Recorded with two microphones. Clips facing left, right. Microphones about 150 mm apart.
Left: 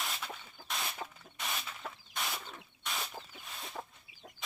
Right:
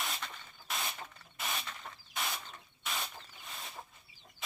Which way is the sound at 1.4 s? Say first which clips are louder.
Right 1 dB; centre (ahead or behind).